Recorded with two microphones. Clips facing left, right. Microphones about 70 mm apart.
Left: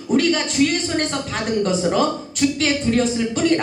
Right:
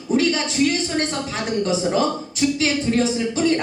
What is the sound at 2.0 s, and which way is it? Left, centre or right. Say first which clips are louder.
A woman's voice: left 1 dB; left.